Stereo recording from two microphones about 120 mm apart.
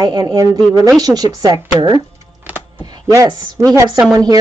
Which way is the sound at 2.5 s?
15° right (ahead or behind).